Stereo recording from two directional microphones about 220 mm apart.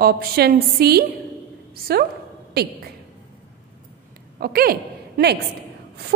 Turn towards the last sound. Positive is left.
turn(degrees=-45)  # may be behind; listen again after turning